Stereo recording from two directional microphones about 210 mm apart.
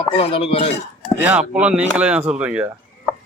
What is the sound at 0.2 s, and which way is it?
Speech, 25° left (ahead or behind).